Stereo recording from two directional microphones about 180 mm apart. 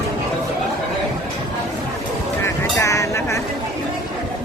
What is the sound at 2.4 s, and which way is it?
Vehicle, 15° left (ahead or behind).